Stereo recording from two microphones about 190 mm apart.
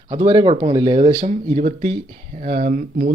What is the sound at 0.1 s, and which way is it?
Speech, 20° right (ahead or behind).